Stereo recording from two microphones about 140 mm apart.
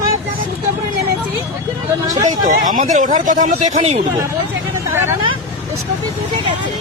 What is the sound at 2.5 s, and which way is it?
Speech, 70° right (ahead or behind).